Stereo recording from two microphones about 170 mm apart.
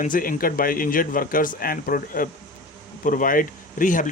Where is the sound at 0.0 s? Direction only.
55° left (ahead or behind).